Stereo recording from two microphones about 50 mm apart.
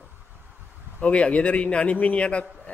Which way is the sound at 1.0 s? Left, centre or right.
Left.